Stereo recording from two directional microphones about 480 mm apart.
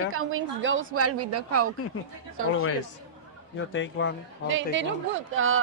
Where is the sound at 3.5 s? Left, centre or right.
Left.